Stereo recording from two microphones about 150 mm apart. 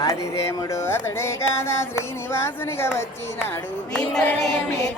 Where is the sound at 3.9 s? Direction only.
5° left (ahead or behind).